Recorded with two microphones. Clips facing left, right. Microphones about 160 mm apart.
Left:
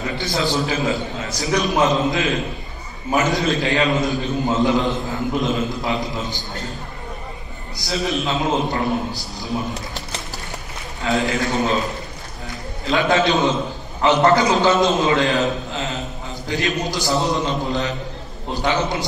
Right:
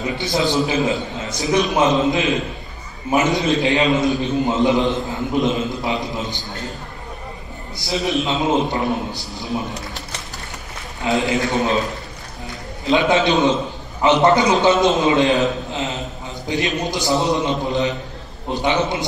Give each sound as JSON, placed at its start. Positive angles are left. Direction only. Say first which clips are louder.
{"t": 0.0, "sound": "a man's voice", "louder": "right 2 dB", "side_deg": -20}
{"t": 7.9, "sound": "a man's voice", "louder": "right 2 dB", "side_deg": -20}
{"t": 11.1, "sound": "a man's voice", "louder": "right 1 dB", "side_deg": -20}